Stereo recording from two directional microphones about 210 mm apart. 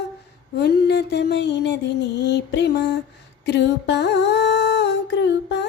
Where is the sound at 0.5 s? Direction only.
50° left (ahead or behind).